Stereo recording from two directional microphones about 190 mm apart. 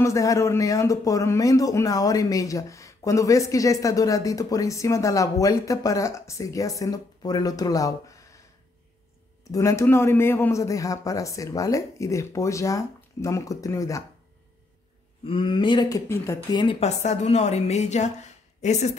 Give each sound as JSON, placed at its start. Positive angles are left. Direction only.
{"t": 0.0, "sound": "a man's voice", "side_deg": 15}
{"t": 9.5, "sound": "a man's voice", "side_deg": 15}
{"t": 15.2, "sound": "speech", "side_deg": 25}
{"t": 16.6, "sound": "speech", "side_deg": 35}